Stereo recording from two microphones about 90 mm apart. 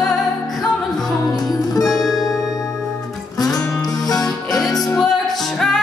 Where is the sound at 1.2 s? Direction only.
45° left (ahead or behind).